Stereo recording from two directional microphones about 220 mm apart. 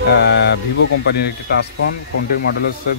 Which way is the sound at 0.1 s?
50° left (ahead or behind).